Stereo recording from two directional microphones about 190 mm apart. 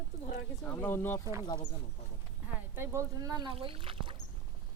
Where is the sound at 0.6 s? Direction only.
10° left (ahead or behind).